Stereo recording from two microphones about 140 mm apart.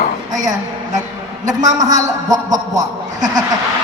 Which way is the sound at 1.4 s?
25° right (ahead or behind).